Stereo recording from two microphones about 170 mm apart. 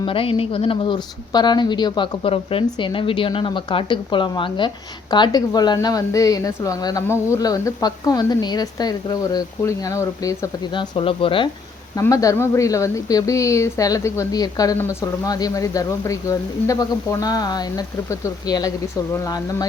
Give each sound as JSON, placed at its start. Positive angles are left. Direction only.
{"t": 0.0, "sound": "speech", "side_deg": 30}
{"t": 11.9, "sound": "speech", "side_deg": 20}